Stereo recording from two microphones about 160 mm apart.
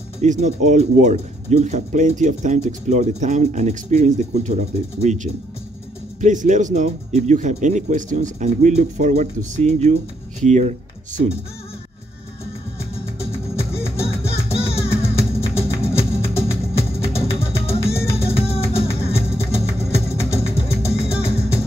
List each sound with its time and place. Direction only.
0.2 s speech: 45° right (ahead or behind)
13.6 s music: 40° left (ahead or behind)